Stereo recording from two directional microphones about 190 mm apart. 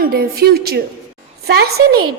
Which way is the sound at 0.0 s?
55° right (ahead or behind).